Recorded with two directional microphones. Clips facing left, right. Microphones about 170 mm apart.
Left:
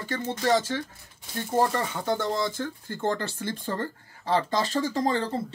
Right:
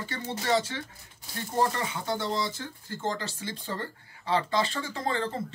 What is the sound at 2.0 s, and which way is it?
Speech, 50° left (ahead or behind).